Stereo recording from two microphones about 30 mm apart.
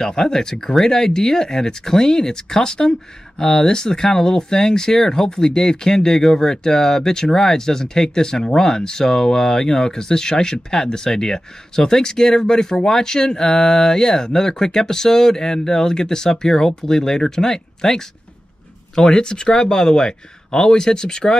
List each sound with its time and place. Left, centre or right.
0.0 s speech: left